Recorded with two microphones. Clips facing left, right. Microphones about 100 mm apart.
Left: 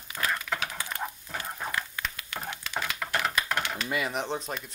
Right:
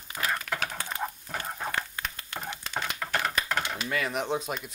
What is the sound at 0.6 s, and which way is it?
Chicken, 45° right (ahead or behind).